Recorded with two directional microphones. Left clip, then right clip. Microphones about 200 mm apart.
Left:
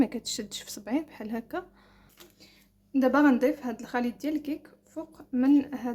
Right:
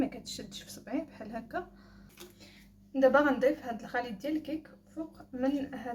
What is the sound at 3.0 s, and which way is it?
Speech, 60° left (ahead or behind).